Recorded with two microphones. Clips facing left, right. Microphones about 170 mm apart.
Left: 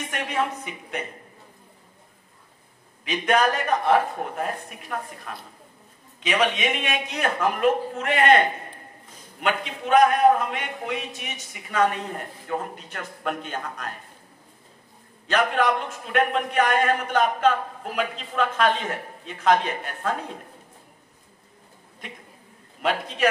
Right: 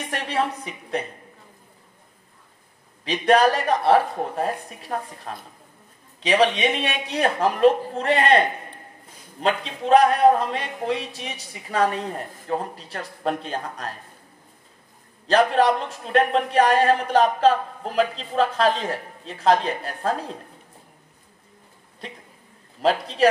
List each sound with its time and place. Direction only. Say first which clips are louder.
0.0 s a man's voice: right 2 dB; 35° right (ahead or behind)
3.1 s a man's voice: right 4 dB; 35° right (ahead or behind)
15.2 s a man's voice: right 4 dB; 35° right (ahead or behind)
22.8 s a man's voice: right 4 dB; 35° right (ahead or behind)